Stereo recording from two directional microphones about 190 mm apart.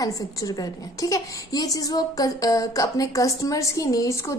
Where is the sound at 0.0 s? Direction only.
20° left (ahead or behind).